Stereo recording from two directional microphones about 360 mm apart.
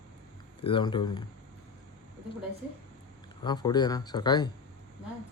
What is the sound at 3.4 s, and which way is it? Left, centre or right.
Speech, centre.